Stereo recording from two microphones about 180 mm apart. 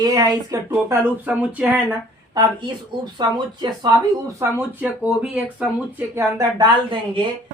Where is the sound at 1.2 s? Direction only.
10° right (ahead or behind).